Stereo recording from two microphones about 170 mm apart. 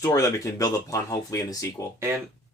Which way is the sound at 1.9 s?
15° right (ahead or behind).